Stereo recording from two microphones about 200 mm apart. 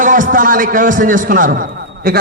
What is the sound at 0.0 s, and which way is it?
A man's voice, 40° right (ahead or behind).